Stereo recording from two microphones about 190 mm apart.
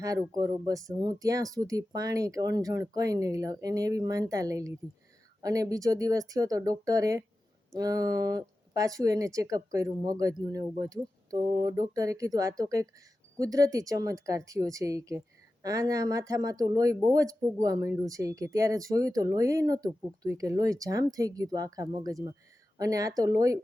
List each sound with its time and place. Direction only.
0.0 s speech: 15° right (ahead or behind)